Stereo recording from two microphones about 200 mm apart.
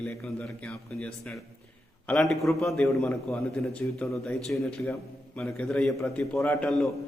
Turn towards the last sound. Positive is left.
turn(degrees=5)  # may be behind; listen again after turning